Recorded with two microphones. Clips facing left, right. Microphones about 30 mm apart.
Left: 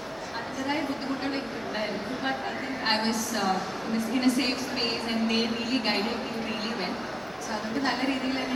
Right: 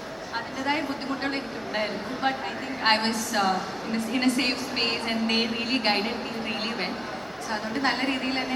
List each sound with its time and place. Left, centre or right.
1.2 s a woman's voice: right
2.8 s a woman's voice: right
7.5 s a woman's voice: right